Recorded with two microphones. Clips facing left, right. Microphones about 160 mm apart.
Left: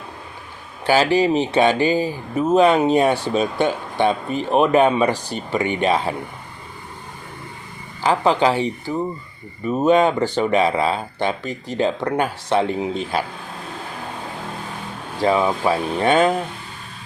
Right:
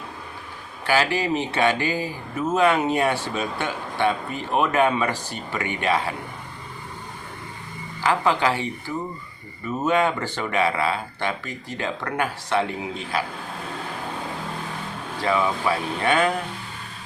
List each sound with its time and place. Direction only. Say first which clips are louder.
0.9 s speech: left 6 dB; 25° left (ahead or behind)
8.0 s speech: left 4 dB; 25° left (ahead or behind)
15.2 s speech: left 5 dB; 30° left (ahead or behind)